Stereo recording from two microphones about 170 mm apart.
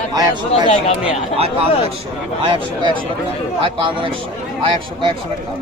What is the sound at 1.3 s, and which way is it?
A man's voice, 35° right (ahead or behind).